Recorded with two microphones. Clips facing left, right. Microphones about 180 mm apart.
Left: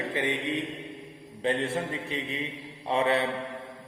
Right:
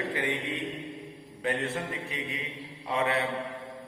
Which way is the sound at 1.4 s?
30° left (ahead or behind).